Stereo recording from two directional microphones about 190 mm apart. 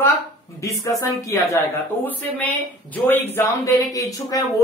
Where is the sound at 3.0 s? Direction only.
10° left (ahead or behind).